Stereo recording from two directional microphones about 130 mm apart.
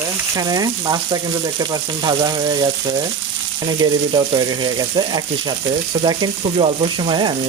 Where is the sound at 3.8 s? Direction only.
35° right (ahead or behind).